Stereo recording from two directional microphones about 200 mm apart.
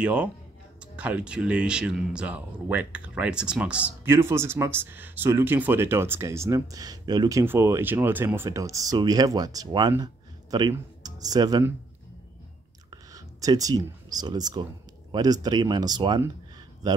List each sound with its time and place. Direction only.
0.0 s speech: 5° right (ahead or behind)
12.9 s speech: 20° right (ahead or behind)